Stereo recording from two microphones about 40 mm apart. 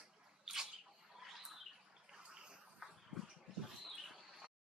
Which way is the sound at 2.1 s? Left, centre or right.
Right.